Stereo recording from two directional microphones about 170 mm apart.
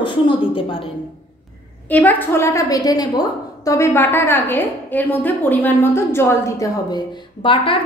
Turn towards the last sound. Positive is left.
turn(degrees=30)  # may be behind; listen again after turning